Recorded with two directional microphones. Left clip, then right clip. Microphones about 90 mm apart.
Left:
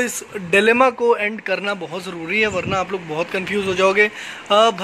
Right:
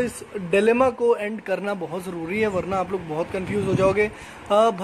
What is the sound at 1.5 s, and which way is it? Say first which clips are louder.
Speech: left 1 dB; 20° right (ahead or behind).